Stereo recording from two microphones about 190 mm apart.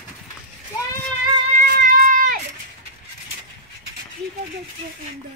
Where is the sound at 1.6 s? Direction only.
50° right (ahead or behind).